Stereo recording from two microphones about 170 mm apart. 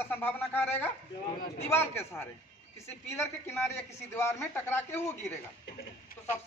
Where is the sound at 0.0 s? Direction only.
10° left (ahead or behind).